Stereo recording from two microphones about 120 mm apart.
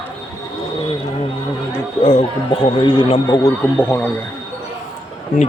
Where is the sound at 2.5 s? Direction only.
45° left (ahead or behind).